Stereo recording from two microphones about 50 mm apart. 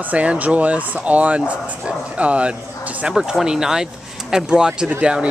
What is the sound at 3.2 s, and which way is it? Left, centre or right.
Speech, centre.